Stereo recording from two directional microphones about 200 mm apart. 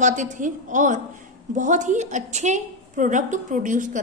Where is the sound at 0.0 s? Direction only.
40° right (ahead or behind).